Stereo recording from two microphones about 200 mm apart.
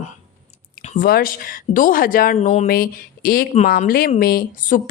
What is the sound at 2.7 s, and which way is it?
Speech, 45° left (ahead or behind).